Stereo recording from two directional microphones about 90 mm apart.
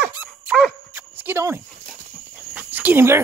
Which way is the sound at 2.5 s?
20° right (ahead or behind).